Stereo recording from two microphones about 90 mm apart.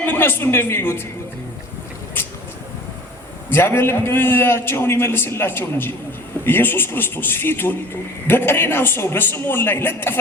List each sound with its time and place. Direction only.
0.0 s a man's voice: 25° left (ahead or behind)
3.5 s a man's voice: 25° left (ahead or behind)